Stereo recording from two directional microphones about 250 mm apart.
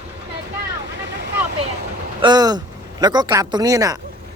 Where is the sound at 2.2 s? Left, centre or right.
Centre.